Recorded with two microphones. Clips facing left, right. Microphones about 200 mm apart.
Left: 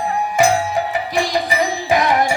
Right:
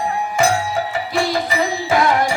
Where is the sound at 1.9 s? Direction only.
20° left (ahead or behind).